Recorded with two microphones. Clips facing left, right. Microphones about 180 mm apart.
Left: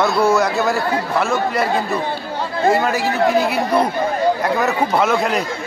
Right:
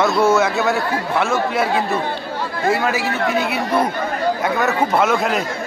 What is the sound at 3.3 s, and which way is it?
A man's voice, centre (ahead or behind).